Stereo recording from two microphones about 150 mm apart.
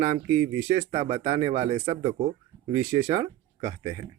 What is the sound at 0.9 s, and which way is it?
Speech, 45° right (ahead or behind).